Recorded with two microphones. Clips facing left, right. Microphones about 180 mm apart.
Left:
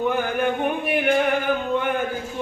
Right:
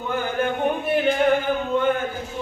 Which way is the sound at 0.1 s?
15° left (ahead or behind).